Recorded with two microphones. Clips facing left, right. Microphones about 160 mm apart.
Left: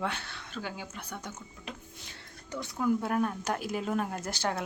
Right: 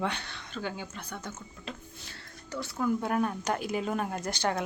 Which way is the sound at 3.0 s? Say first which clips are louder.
Right 1 dB; centre (ahead or behind).